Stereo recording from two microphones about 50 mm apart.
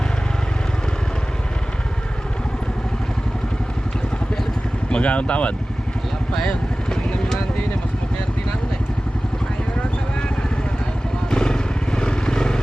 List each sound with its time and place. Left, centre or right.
4.9 s speech: left
6.5 s vehicle: left
11.3 s vehicle: centre